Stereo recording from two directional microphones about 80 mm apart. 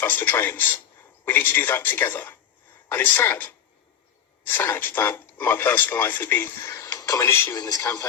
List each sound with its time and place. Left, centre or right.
0.0 s speech: left
6.6 s a sound: left
7.0 s speech: left
7.5 s speech: left